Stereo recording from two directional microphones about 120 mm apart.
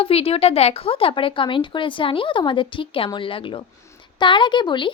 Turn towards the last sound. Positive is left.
turn(degrees=40)  # may be behind; listen again after turning